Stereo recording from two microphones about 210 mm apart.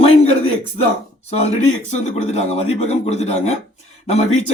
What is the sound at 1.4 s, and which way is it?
A man's voice, 35° left (ahead or behind).